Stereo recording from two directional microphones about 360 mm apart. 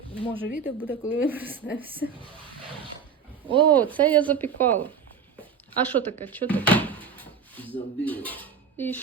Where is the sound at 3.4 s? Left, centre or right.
Centre.